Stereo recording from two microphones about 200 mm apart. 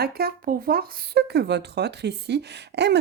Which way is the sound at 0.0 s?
50° right (ahead or behind).